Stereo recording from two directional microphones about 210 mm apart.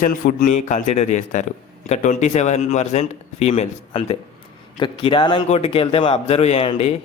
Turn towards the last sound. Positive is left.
turn(degrees=25)  # may be behind; listen again after turning